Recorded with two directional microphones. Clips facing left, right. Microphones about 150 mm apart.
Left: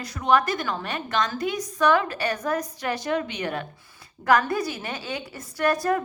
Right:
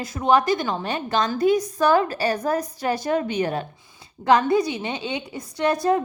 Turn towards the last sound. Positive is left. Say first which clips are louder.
# right 2 dB
turn(degrees=-20)  # may be behind; listen again after turning